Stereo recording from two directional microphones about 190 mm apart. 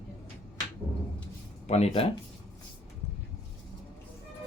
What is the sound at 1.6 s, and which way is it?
Speech, 35° left (ahead or behind).